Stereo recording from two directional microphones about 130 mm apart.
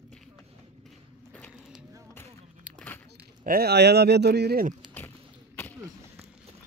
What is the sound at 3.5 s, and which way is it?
Speech, 90° right.